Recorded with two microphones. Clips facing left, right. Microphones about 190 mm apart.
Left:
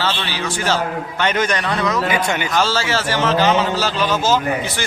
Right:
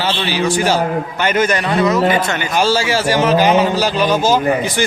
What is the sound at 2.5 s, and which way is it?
A man's voice, 15° right (ahead or behind).